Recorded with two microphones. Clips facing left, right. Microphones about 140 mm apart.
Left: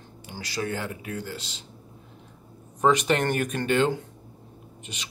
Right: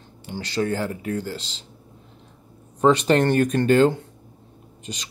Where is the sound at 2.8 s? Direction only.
30° right (ahead or behind).